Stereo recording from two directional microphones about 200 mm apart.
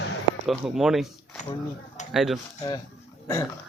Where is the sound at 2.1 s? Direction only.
Centre (ahead or behind).